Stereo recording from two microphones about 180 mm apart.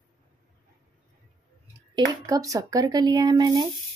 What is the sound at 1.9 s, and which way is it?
Speech, 20° right (ahead or behind).